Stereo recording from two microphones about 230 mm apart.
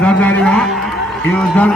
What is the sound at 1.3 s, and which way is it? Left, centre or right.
Speech, centre.